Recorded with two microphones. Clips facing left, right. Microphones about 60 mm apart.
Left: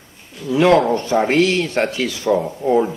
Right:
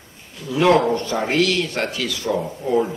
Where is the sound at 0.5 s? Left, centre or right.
Left.